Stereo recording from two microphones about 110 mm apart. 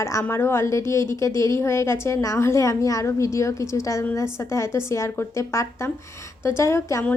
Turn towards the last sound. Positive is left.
turn(degrees=25)  # may be behind; listen again after turning